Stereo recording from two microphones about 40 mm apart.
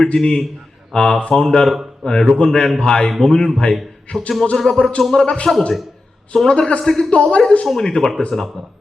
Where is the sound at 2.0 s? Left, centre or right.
Left.